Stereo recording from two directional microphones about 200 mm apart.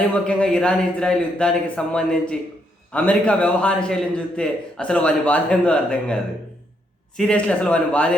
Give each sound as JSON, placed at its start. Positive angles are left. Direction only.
{"t": 0.1, "sound": "speech", "side_deg": 5}
{"t": 7.2, "sound": "speech", "side_deg": 5}